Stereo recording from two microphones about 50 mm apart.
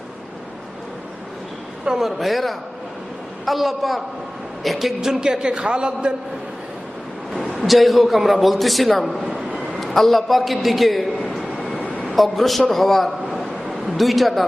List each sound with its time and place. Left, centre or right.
1.8 s a man's voice: centre
2.0 s a man's voice: centre
4.9 s a man's voice: centre
7.6 s a man's voice: centre
9.6 s a sound: centre
12.0 s a man's voice: centre
13.4 s a sound: centre